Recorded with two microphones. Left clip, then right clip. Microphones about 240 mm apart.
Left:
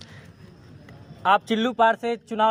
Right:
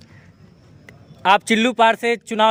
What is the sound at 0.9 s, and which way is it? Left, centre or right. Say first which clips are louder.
A man's voice: right 4 dB; right.